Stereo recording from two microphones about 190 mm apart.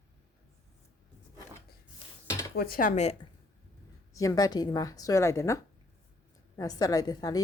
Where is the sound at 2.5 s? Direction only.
50° left (ahead or behind).